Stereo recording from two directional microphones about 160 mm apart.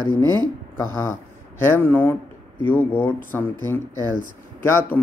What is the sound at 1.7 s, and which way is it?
Speech, 15° left (ahead or behind).